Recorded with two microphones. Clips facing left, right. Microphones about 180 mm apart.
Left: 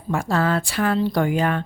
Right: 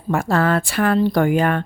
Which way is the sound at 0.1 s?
60° right (ahead or behind).